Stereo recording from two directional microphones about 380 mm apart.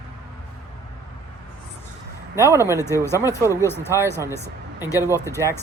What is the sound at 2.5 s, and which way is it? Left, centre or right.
Speech, centre.